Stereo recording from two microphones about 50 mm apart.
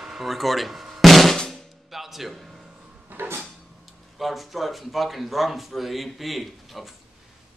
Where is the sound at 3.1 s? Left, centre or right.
Right.